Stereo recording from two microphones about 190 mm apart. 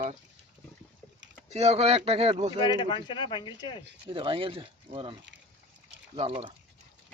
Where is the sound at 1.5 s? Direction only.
35° right (ahead or behind).